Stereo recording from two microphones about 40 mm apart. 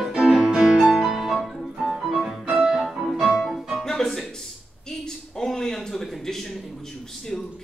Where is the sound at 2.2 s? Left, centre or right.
Centre.